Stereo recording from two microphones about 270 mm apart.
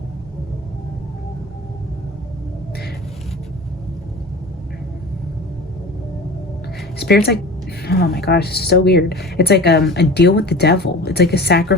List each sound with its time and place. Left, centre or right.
7.0 s speech: left